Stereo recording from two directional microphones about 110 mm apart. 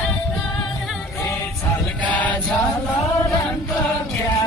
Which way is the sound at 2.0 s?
15° left (ahead or behind).